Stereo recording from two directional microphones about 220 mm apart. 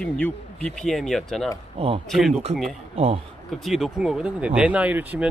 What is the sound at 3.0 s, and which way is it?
Speech, 25° right (ahead or behind).